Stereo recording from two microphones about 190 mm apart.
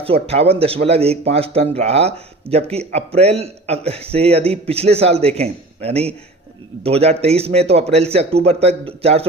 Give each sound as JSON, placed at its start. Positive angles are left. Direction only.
{"t": 0.0, "sound": "speech", "side_deg": -30}